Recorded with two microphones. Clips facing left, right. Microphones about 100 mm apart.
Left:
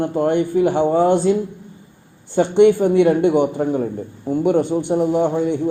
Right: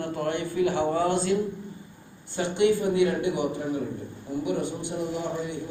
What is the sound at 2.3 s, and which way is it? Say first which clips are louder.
A man's voice: left 10 dB; 60° left (ahead or behind).